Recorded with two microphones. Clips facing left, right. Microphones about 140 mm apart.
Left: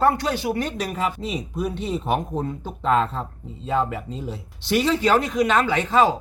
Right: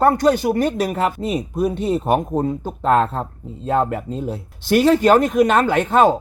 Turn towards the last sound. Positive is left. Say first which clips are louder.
# right 4 dB
turn(degrees=-55)  # may be behind; listen again after turning